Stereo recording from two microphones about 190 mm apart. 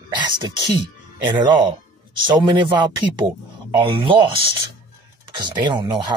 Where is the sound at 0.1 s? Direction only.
25° right (ahead or behind).